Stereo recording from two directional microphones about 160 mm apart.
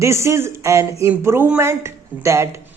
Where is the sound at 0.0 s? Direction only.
15° right (ahead or behind).